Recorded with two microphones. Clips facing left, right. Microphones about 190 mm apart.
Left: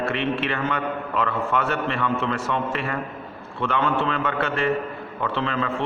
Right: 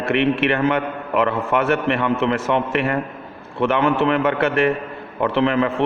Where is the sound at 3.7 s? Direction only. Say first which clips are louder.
Right 5 dB; 65° right (ahead or behind).